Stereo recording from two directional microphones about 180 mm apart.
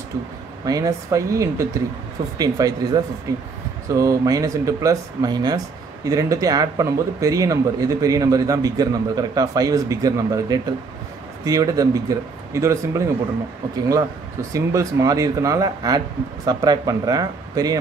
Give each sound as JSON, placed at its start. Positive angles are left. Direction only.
{"t": 0.7, "sound": "a man's voice", "side_deg": -20}